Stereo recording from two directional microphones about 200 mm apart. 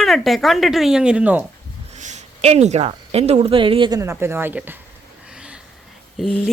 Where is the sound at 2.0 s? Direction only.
35° right (ahead or behind); by 4.8 s 10° right (ahead or behind).